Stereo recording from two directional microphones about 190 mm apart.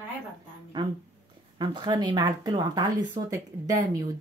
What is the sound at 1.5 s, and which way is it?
Speech, 25° right (ahead or behind).